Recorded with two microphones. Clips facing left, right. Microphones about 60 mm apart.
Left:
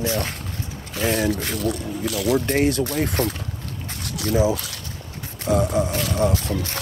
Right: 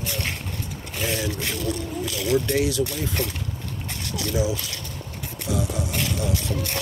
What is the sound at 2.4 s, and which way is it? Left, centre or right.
Speech, left.